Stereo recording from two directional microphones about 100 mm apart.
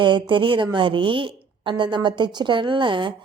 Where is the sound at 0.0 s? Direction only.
55° right (ahead or behind).